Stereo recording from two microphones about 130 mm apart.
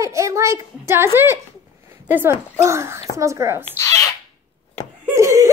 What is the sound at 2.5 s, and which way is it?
A child's voice, 20° right (ahead or behind).